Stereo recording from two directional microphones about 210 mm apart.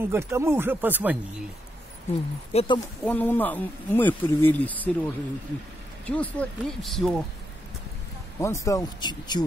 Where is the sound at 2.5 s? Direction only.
30° left (ahead or behind).